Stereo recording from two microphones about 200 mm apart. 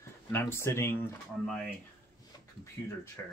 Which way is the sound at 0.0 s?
10° left (ahead or behind).